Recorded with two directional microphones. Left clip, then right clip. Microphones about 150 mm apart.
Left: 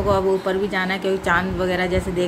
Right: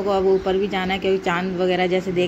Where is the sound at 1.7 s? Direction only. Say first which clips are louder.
Right 3 dB; 45° left (ahead or behind).